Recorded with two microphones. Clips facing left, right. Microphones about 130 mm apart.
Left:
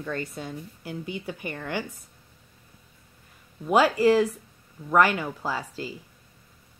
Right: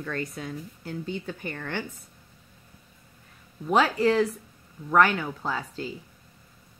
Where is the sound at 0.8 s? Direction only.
10° left (ahead or behind).